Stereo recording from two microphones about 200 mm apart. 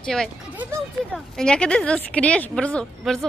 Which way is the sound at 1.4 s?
5° left (ahead or behind).